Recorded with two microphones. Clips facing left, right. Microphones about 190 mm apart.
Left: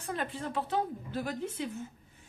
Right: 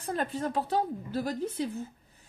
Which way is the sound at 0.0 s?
40° right (ahead or behind).